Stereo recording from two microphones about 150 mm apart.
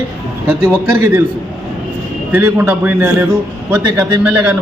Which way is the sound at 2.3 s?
15° right (ahead or behind).